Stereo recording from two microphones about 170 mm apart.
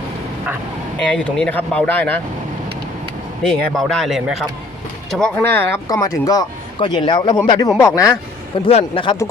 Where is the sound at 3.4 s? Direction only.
Centre (ahead or behind).